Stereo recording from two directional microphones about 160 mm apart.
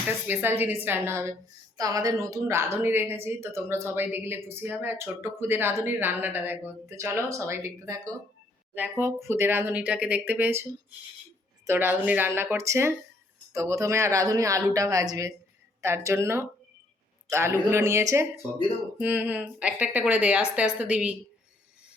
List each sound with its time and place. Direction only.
0.3 s a woman's voice: 10° right (ahead or behind)